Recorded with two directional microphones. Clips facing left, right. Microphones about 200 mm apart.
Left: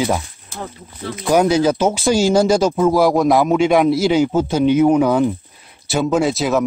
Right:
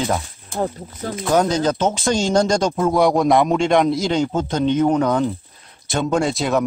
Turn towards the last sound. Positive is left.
turn(degrees=0)  # may be behind; listen again after turning